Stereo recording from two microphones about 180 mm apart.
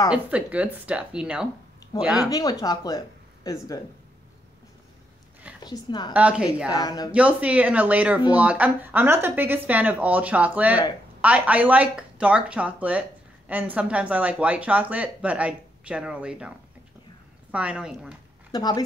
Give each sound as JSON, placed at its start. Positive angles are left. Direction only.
{"t": 0.1, "sound": "speech", "side_deg": -5}
{"t": 2.1, "sound": "speech", "side_deg": 20}
{"t": 5.6, "sound": "speech", "side_deg": 25}
{"t": 6.1, "sound": "speech", "side_deg": -5}
{"t": 6.7, "sound": "speech", "side_deg": 20}
{"t": 7.1, "sound": "speech", "side_deg": -5}
{"t": 18.5, "sound": "speech", "side_deg": 20}